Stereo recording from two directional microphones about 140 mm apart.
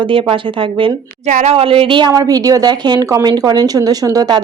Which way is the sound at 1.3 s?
55° right (ahead or behind).